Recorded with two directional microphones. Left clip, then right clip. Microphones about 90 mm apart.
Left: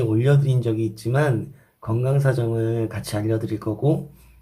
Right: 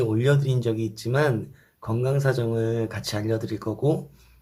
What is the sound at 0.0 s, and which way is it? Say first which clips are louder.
Speech: left 1 dB; 25° right (ahead or behind).